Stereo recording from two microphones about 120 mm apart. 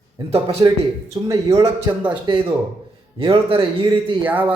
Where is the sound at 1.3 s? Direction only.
25° right (ahead or behind); by 4.2 s 40° right (ahead or behind).